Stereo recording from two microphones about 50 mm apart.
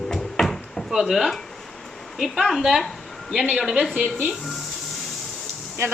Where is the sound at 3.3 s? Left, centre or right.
Centre.